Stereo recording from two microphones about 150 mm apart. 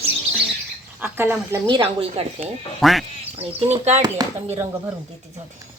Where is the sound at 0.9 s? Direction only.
15° right (ahead or behind).